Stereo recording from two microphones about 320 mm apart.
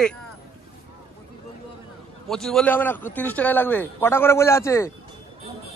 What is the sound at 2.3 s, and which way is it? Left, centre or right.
Speech, centre.